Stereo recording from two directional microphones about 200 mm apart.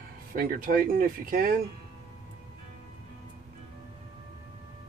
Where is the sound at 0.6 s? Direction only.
45° right (ahead or behind).